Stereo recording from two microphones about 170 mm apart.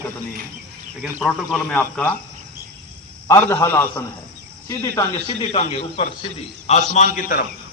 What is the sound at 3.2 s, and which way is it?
A man's voice, 15° left (ahead or behind).